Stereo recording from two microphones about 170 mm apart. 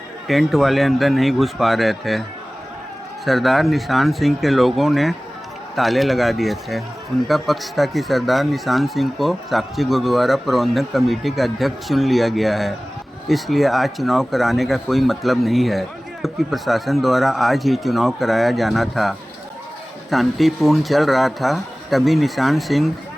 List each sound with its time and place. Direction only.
0.3 s speech: centre (ahead or behind)
3.2 s speech: centre (ahead or behind)